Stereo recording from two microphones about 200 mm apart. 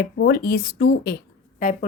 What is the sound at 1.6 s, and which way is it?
Speech, 40° left (ahead or behind).